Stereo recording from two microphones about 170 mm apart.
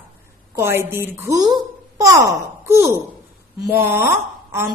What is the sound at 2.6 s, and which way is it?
Speech, 15° right (ahead or behind).